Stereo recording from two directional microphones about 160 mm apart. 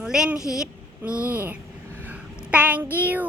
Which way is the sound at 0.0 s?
5° right (ahead or behind).